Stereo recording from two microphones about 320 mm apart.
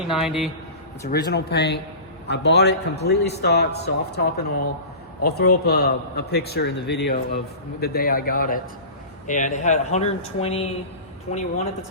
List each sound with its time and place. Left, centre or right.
0.1 s a man's voice: centre
1.0 s speech: left
5.2 s a man's voice: left